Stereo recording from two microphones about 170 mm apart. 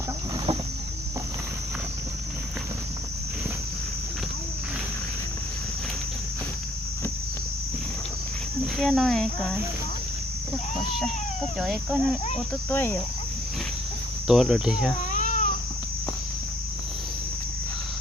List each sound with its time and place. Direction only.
8.8 s speech: centre (ahead or behind)
11.6 s speech: centre (ahead or behind)
12.7 s speech: 10° left (ahead or behind)
14.3 s speech: centre (ahead or behind)
15.1 s cat: 45° left (ahead or behind)